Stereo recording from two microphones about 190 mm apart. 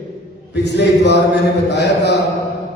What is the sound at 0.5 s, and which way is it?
Speech, 60° left (ahead or behind).